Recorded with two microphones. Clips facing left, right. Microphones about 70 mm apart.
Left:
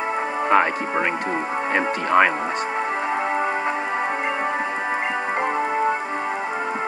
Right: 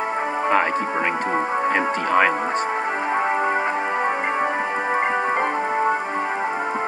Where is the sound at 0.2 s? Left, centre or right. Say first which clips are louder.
Right 1 dB; right.